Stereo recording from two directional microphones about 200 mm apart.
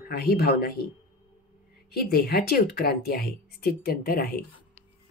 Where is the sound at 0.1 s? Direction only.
50° left (ahead or behind).